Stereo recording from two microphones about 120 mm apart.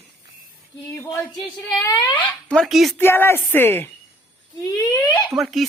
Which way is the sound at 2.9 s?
20° left (ahead or behind).